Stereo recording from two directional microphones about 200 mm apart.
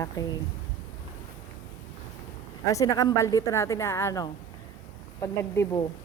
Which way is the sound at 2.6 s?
15° left (ahead or behind).